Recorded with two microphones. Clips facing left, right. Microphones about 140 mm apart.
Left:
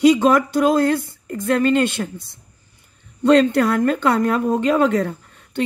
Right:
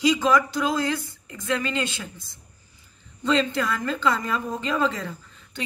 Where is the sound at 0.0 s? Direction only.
60° left (ahead or behind).